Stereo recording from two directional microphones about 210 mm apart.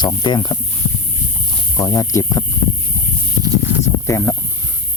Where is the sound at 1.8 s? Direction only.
15° left (ahead or behind).